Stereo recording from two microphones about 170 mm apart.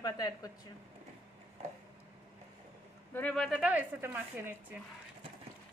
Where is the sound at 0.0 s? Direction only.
20° left (ahead or behind).